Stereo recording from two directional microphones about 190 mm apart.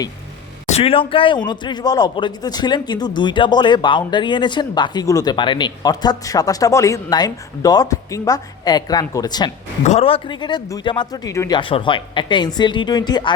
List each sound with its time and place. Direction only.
0.7 s speech: 30° left (ahead or behind)
9.8 s speech: 35° left (ahead or behind)